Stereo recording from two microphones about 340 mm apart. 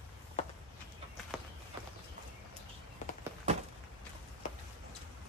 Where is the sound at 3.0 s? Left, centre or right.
Centre.